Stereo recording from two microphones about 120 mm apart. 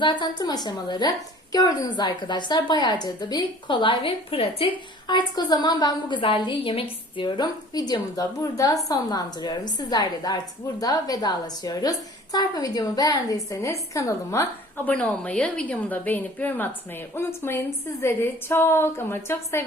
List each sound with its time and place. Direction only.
0.0 s a woman's voice: 40° left (ahead or behind)
5.0 s a woman's voice: 40° left (ahead or behind)
14.8 s a woman's voice: 10° left (ahead or behind)